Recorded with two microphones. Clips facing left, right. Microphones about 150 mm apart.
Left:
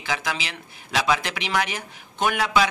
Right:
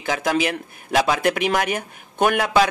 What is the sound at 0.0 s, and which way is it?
Speech, 50° right (ahead or behind).